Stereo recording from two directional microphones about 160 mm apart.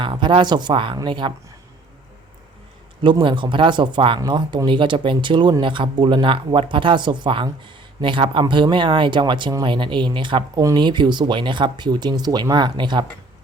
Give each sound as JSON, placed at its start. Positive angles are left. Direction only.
{"t": 0.0, "sound": "speech", "side_deg": -30}
{"t": 3.0, "sound": "speech", "side_deg": -30}